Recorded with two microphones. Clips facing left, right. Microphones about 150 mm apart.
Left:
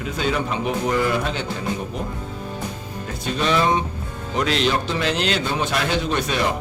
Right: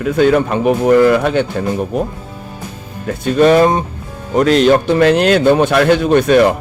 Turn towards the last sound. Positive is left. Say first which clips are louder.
# right 12 dB
turn(degrees=-55)  # may be behind; listen again after turning